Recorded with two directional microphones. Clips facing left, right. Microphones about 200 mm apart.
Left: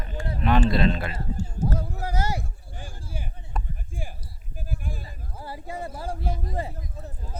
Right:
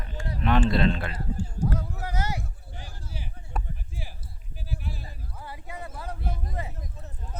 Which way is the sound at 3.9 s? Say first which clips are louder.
Left 4 dB; 50° left (ahead or behind).